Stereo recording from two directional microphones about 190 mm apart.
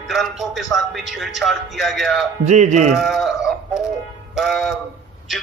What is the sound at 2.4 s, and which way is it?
Speech, 40° right (ahead or behind).